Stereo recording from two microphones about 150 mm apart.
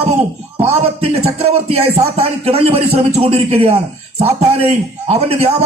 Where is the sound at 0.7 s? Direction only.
45° right (ahead or behind).